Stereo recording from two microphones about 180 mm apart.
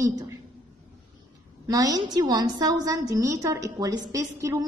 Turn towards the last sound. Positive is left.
turn(degrees=-20)  # may be behind; listen again after turning